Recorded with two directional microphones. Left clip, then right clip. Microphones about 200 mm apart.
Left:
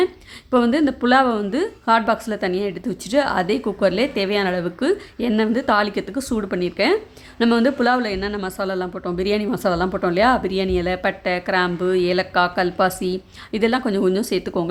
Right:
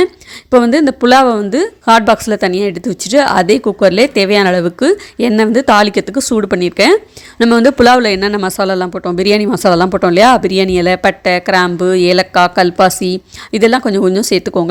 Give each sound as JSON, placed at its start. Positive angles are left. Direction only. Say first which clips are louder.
{"t": 0.5, "sound": "speech", "louder": "right 9 dB", "side_deg": -30}